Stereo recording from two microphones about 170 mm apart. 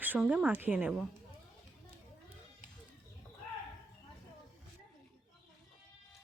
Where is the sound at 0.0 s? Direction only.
10° right (ahead or behind).